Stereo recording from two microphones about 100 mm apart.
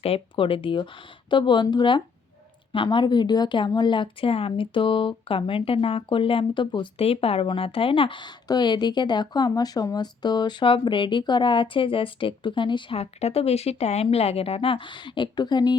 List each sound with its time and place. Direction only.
0.0 s speech: 70° left (ahead or behind); by 6.8 s 50° left (ahead or behind)
7.0 s speech: 75° left (ahead or behind); by 13.0 s 55° left (ahead or behind)
13.0 s speech: 90° left; by 15.7 s 45° left (ahead or behind)